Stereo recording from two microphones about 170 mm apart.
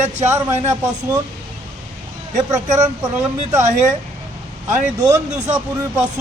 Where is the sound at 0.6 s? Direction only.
20° right (ahead or behind).